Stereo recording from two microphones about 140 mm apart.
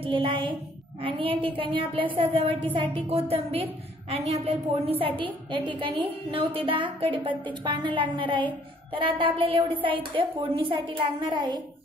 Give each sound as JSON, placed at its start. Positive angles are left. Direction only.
{"t": 0.0, "sound": "a woman's voice", "side_deg": -40}